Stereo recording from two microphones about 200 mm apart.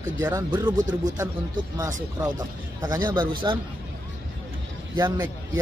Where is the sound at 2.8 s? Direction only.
20° right (ahead or behind).